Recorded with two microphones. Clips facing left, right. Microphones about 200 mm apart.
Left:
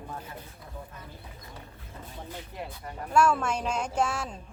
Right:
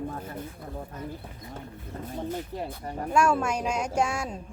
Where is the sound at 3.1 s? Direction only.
10° right (ahead or behind).